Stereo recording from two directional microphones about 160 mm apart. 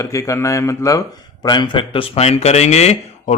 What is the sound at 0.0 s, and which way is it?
Speech, 20° left (ahead or behind).